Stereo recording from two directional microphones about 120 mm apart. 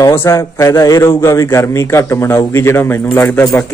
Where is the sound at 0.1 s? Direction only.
20° left (ahead or behind).